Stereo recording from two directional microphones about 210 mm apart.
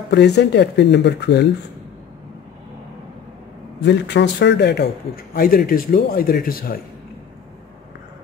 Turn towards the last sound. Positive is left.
turn(degrees=45)  # may be behind; listen again after turning